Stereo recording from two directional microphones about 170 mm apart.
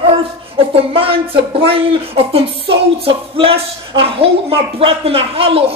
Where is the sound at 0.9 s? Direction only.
35° right (ahead or behind).